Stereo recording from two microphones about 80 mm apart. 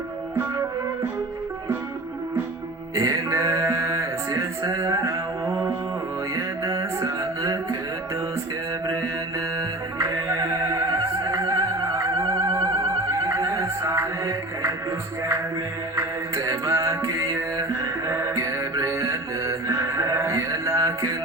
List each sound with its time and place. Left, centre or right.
2.9 s music: right
6.3 s music: right
10.3 s music: right
16.0 s music: right